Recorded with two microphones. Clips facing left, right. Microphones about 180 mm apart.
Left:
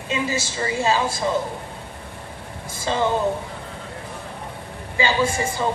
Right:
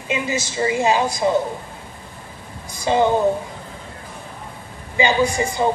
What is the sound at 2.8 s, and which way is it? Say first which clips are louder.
Speech: right 5 dB; 15° right (ahead or behind).